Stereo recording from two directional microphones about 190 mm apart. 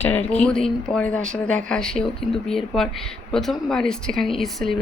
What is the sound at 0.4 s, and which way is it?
Speech, 5° left (ahead or behind).